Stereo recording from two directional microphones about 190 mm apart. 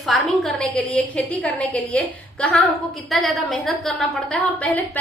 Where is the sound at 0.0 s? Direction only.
Centre (ahead or behind).